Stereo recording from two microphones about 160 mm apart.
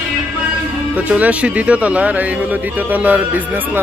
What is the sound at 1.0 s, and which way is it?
Speech, 10° right (ahead or behind).